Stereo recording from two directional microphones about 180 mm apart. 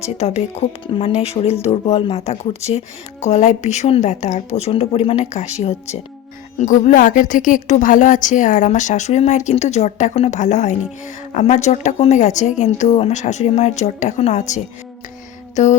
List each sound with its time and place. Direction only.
0.0 s speech: 35° left (ahead or behind)